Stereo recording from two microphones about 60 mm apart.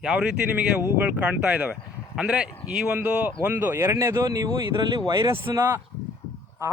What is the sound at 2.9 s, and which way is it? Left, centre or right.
Speech, right.